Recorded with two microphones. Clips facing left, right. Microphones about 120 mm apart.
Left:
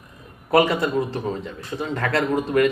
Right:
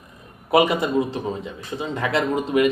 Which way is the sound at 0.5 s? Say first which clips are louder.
Even; 15° right (ahead or behind).